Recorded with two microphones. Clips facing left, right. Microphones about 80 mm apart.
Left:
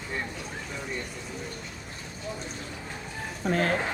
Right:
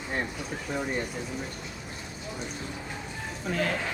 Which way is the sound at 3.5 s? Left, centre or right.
Left.